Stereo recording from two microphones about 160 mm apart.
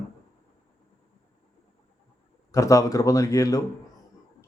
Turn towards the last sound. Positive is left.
turn(degrees=20)  # may be behind; listen again after turning